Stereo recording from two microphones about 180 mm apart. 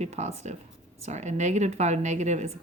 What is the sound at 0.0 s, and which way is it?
Speech, 35° right (ahead or behind).